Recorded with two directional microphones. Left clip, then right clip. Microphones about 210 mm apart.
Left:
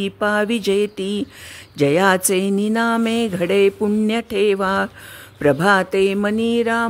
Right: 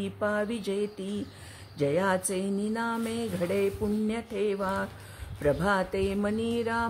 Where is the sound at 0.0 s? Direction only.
45° left (ahead or behind).